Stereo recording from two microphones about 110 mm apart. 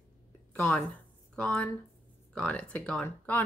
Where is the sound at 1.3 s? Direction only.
10° left (ahead or behind).